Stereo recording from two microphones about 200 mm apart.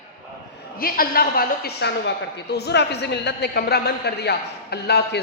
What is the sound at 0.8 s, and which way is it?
A woman's voice, 45° left (ahead or behind).